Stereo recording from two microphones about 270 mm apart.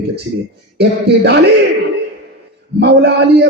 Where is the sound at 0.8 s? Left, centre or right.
Right.